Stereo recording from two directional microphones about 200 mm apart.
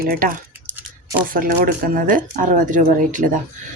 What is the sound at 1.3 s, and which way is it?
Speech, 45° right (ahead or behind).